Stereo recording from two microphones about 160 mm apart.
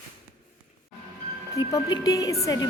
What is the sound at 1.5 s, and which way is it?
Speech, 20° left (ahead or behind).